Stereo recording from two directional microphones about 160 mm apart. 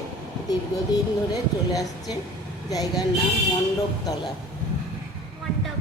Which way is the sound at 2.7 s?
25° left (ahead or behind).